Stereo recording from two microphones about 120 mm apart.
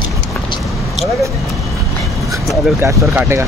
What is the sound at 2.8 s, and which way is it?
Speech, 20° right (ahead or behind).